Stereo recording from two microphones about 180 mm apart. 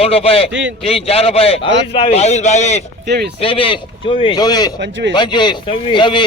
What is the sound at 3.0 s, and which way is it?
Speech, 65° right (ahead or behind).